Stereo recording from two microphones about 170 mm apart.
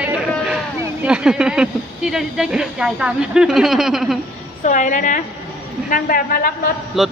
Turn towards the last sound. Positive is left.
turn(degrees=0)  # may be behind; listen again after turning